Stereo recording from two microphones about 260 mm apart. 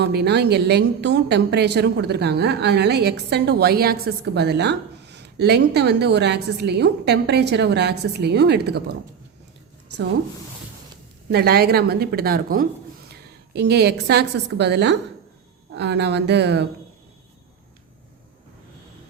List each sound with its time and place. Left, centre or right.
0.0 s a woman's voice: right
11.3 s a woman's voice: right